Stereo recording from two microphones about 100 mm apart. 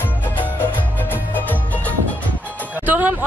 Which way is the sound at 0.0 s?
20° left (ahead or behind).